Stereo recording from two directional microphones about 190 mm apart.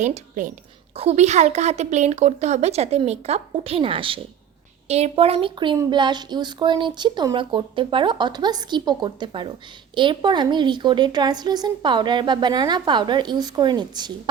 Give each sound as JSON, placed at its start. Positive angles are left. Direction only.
{"t": 0.0, "sound": "speech", "side_deg": -40}